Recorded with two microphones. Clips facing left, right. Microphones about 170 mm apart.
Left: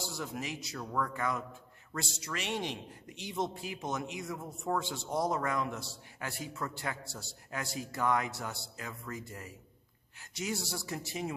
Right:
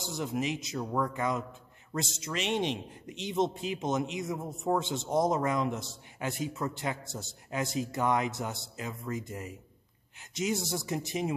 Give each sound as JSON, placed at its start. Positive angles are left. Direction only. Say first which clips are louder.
{"t": 0.0, "sound": "speech", "louder": "right 6 dB", "side_deg": -20}